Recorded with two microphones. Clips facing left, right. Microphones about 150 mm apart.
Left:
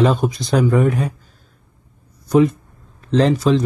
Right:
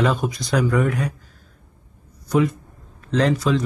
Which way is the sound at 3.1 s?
25° left (ahead or behind).